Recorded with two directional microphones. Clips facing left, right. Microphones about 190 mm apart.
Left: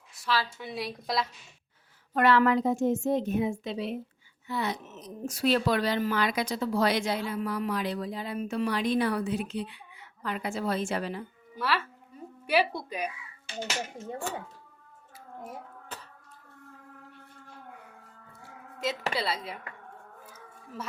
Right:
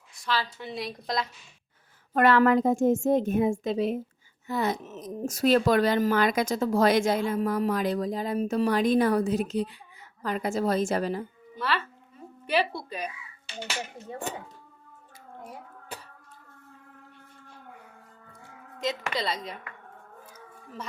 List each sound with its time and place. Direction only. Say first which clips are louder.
0.2 s a woman's voice: even; 5° left (ahead or behind)
2.1 s a woman's voice: right 3 dB; 50° right (ahead or behind)
11.5 s a woman's voice: even; 10° left (ahead or behind)
14.3 s speech: right 1 dB; 20° right (ahead or behind)
15.9 s a sound: right 3 dB; 10° right (ahead or behind)
19.1 s a woman's voice: right 1 dB; 5° left (ahead or behind)